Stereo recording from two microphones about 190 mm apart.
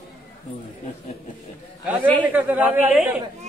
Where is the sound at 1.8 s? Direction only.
10° right (ahead or behind).